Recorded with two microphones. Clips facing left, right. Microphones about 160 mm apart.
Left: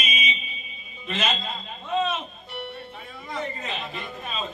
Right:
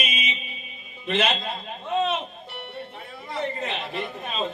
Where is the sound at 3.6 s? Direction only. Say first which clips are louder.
Right 4 dB; 65° right (ahead or behind).